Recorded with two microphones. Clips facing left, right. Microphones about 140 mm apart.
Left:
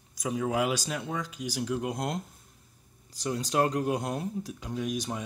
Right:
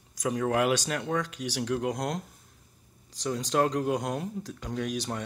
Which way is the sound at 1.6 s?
5° left (ahead or behind).